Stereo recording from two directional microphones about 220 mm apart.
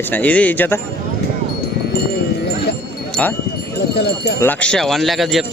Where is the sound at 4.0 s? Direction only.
50° left (ahead or behind).